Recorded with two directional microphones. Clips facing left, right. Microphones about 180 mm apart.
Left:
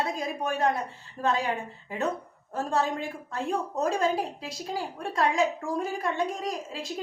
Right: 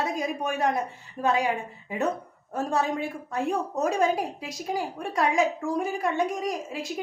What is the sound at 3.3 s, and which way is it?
A woman's voice, 15° right (ahead or behind).